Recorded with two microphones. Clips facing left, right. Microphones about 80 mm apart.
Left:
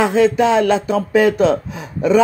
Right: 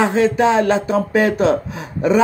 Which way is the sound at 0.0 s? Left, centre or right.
Right.